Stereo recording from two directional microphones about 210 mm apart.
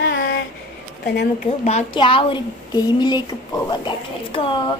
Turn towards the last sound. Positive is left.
turn(degrees=25)  # may be behind; listen again after turning